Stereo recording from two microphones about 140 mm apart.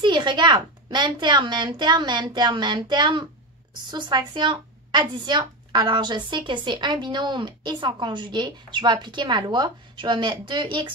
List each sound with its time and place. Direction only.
0.0 s speech: 35° right (ahead or behind)